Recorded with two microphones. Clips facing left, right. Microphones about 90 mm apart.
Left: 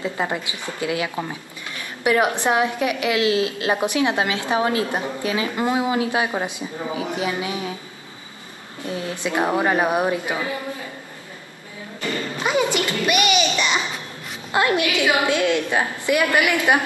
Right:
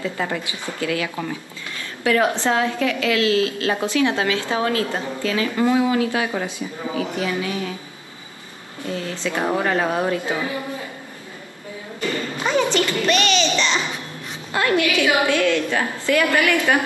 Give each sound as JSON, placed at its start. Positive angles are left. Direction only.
{"t": 0.0, "sound": "a woman's voice", "side_deg": 20}
{"t": 8.8, "sound": "a woman's voice", "side_deg": 20}
{"t": 12.4, "sound": "a child's voice", "side_deg": 10}